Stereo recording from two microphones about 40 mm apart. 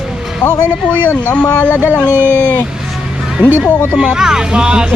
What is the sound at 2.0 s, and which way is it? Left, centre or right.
Speech, right.